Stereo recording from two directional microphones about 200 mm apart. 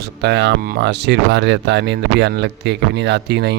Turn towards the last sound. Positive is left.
turn(degrees=-55)  # may be behind; listen again after turning